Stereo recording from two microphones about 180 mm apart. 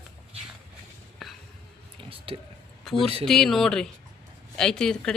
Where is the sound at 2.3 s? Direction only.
30° right (ahead or behind).